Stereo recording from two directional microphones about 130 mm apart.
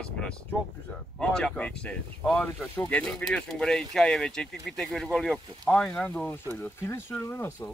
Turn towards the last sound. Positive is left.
turn(degrees=15)  # may be behind; listen again after turning